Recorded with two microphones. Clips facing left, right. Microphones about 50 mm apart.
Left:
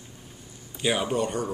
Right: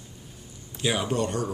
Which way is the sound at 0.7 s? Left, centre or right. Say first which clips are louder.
Left 1 dB; centre.